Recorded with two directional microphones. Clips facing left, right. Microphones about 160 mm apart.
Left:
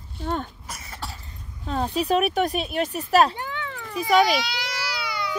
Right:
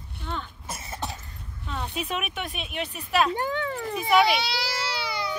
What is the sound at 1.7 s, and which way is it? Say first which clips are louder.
Speech: left 9 dB; 40° left (ahead or behind).